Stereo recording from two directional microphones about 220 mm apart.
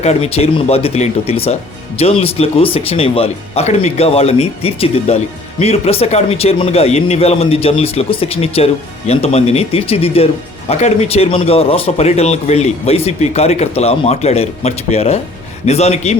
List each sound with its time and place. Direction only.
0.0 s speech: 30° left (ahead or behind)